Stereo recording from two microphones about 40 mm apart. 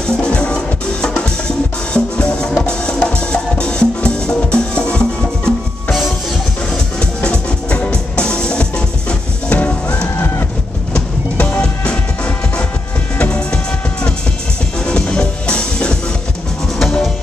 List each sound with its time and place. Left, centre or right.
0.0 s music: left
2.0 s music: left
7.0 s music: left
9.5 s music: left
13.2 s music: left
14.9 s music: left
16.7 s music: centre